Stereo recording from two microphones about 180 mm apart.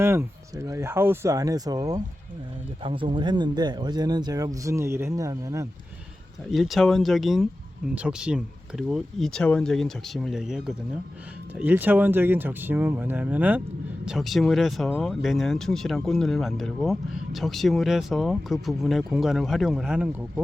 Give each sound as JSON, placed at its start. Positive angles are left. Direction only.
{"t": 0.0, "sound": "speech", "side_deg": -15}
{"t": 6.5, "sound": "speech", "side_deg": 0}